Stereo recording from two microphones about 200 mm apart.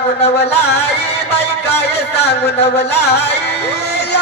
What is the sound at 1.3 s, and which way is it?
A man's voice, 55° left (ahead or behind).